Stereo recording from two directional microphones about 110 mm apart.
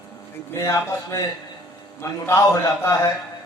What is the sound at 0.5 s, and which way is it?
A man's voice, 25° left (ahead or behind).